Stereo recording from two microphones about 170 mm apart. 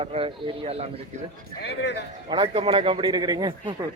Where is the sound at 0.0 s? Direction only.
35° right (ahead or behind).